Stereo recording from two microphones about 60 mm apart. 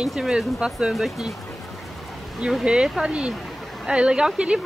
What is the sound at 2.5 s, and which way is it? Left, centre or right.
Speech, centre.